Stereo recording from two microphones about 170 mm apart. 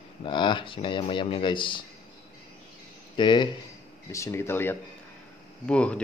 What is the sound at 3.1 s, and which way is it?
Speech, 25° left (ahead or behind).